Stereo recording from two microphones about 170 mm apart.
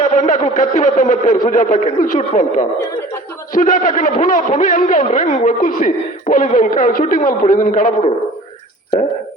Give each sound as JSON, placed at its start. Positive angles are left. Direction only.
{"t": 0.0, "sound": "a man's voice", "side_deg": 45}